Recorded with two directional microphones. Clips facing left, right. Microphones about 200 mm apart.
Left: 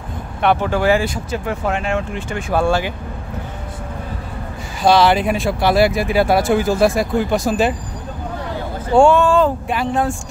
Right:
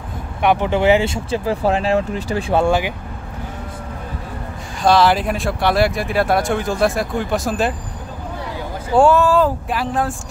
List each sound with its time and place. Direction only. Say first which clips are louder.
0.4 s speech: right 1 dB; 15° right (ahead or behind); by 2.4 s 35° right (ahead or behind)
2.5 s speech: even; 20° right (ahead or behind)
4.8 s speech: left 1 dB; centre (ahead or behind)
8.9 s speech: left 1 dB; 5° right (ahead or behind)